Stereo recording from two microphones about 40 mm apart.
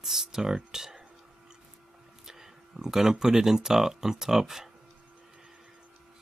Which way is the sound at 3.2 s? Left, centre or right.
Centre.